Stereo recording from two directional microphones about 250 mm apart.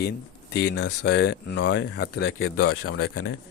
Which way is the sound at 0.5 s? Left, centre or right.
Left.